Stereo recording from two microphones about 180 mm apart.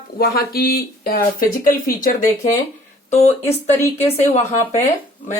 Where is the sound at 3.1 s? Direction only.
35° left (ahead or behind).